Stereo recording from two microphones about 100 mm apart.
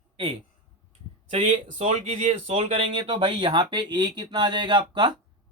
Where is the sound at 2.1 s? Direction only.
65° right (ahead or behind).